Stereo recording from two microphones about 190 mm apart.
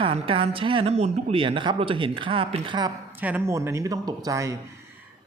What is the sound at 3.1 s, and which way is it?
Speech, 10° right (ahead or behind).